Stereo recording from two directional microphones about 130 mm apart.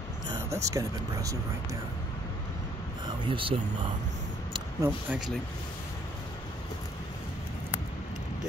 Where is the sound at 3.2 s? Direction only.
40° right (ahead or behind).